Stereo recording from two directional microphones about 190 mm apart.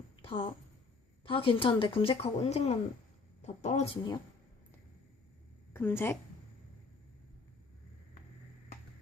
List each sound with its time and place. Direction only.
0.2 s a sound: 25° left (ahead or behind)
1.2 s a woman's voice: 25° left (ahead or behind)
5.7 s a woman's voice: 10° left (ahead or behind)